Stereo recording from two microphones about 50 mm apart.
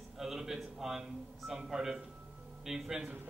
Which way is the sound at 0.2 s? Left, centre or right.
Centre.